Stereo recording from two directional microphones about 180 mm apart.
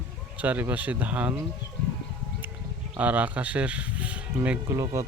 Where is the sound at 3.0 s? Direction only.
10° right (ahead or behind).